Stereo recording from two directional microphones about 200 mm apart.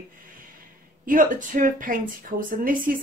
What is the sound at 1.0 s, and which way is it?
Speech, 45° right (ahead or behind).